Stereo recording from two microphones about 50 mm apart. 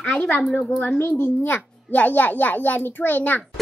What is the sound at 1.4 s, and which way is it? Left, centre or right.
A child's voice, left.